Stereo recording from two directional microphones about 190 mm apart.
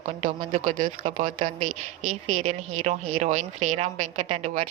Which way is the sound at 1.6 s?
90° right.